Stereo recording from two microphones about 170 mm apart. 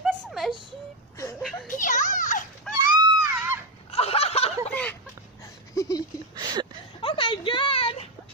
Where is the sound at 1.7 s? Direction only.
50° left (ahead or behind).